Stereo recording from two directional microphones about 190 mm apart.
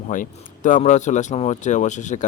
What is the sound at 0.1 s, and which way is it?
Speech, 45° left (ahead or behind).